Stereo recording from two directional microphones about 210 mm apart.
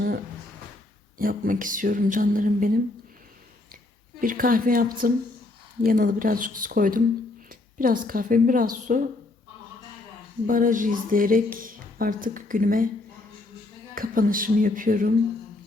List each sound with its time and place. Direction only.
1.2 s speech: 40° right (ahead or behind)
4.2 s speech: 40° right (ahead or behind)
10.4 s speech: 40° right (ahead or behind)
13.9 s speech: 40° right (ahead or behind)